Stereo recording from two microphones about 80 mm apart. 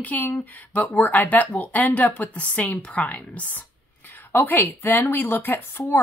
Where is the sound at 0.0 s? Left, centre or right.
Centre.